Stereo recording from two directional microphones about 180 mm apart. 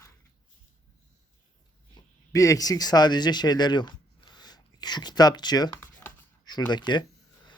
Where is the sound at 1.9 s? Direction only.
20° left (ahead or behind).